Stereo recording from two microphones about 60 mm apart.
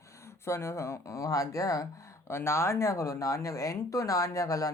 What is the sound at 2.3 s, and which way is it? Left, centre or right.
Speech, left.